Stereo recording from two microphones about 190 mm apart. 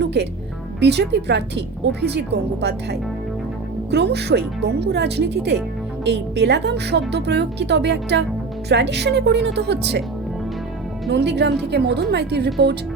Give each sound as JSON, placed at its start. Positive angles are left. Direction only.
{"t": 0.0, "sound": "music", "side_deg": -60}
{"t": 0.8, "sound": "a woman's voice", "side_deg": -65}
{"t": 11.1, "sound": "a woman's voice", "side_deg": -65}